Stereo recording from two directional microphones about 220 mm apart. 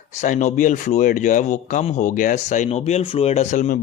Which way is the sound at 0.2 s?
35° left (ahead or behind).